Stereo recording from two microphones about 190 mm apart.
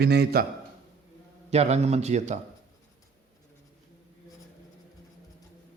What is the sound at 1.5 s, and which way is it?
Speech, 35° right (ahead or behind).